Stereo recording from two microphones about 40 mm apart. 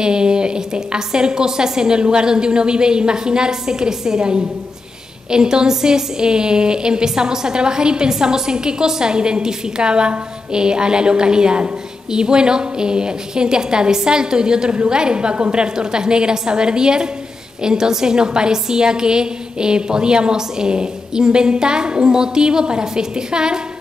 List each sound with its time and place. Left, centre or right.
0.0 s a woman's voice: right